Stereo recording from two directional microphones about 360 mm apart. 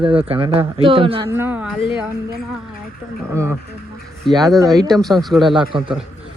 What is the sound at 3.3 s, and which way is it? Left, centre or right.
Speech, centre.